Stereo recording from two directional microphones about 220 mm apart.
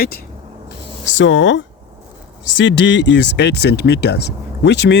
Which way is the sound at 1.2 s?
55° left (ahead or behind).